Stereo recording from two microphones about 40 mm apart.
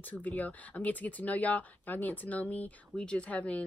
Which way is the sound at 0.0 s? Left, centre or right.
Left.